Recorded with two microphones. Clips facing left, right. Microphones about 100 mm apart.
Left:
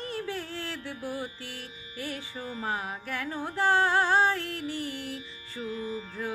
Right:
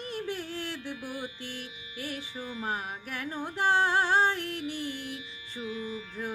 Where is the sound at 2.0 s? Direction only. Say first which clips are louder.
Left 1 dB; 40° left (ahead or behind).